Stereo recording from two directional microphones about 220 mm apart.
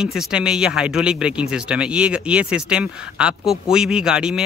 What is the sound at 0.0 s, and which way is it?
Speech, 5° right (ahead or behind).